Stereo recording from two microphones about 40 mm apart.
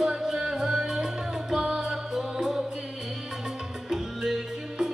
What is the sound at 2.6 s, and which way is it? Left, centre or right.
Music, right.